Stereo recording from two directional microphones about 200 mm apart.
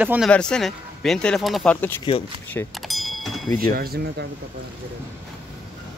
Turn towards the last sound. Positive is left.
turn(degrees=-50)  # may be behind; listen again after turning